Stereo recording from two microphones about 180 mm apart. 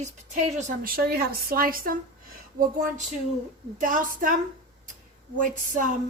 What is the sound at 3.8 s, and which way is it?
Speech, 50° right (ahead or behind).